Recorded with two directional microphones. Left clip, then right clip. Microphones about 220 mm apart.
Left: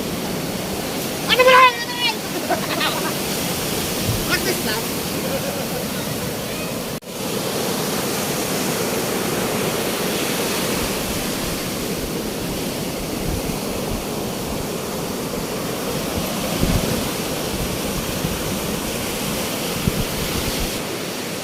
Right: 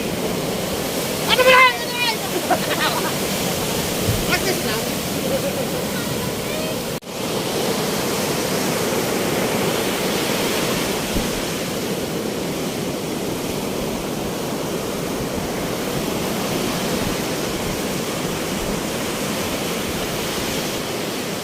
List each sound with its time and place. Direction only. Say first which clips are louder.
1.3 s speech: left 1 dB; 40° left (ahead or behind)